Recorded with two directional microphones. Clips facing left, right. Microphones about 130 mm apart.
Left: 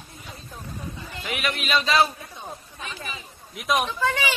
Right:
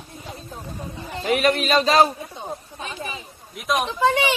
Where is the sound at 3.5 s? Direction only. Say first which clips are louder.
Right 1 dB; centre (ahead or behind).